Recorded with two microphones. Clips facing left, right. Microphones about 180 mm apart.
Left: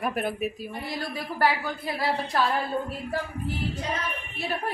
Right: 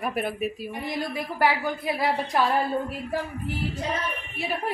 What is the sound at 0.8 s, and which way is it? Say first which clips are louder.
A woman's voice: right 4 dB; 20° right (ahead or behind).